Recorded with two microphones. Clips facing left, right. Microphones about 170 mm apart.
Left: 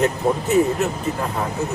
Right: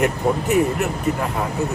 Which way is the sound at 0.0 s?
15° right (ahead or behind).